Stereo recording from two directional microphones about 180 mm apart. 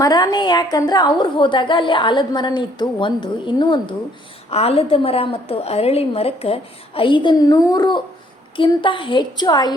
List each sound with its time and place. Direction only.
0.0 s a woman's voice: 20° left (ahead or behind)